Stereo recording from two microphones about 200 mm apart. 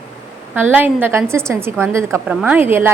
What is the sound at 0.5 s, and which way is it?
A woman's voice, 10° right (ahead or behind).